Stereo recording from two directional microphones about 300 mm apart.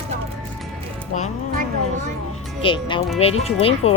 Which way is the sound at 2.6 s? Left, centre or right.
Centre.